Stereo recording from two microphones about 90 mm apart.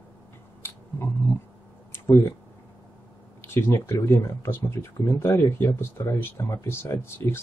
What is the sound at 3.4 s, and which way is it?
Speech, 25° left (ahead or behind).